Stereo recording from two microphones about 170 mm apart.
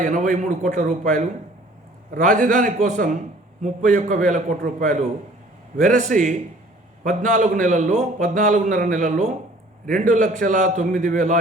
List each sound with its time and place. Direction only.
0.0 s a man's voice: 50° right (ahead or behind)